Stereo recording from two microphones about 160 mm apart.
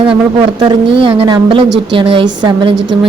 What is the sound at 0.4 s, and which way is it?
A woman's voice, 30° right (ahead or behind).